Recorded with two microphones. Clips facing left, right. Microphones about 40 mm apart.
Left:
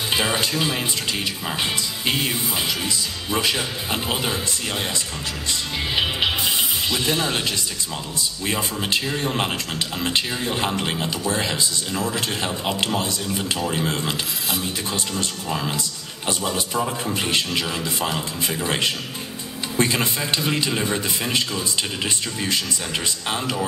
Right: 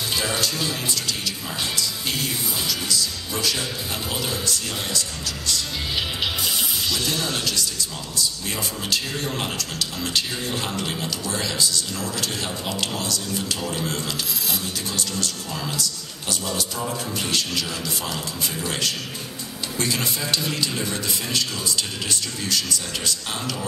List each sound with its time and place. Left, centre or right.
0.1 s speech: left